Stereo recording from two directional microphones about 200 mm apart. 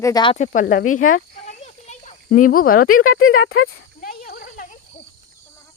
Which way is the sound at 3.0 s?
90° left.